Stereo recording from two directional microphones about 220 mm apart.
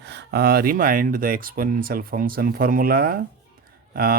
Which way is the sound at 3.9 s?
40° right (ahead or behind).